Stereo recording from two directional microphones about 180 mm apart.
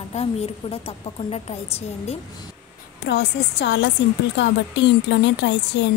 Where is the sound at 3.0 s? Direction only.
75° left (ahead or behind).